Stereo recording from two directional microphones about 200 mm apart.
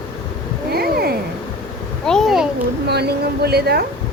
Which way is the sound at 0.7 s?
50° right (ahead or behind).